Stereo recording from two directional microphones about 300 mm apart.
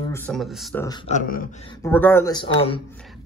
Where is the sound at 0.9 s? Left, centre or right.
Centre.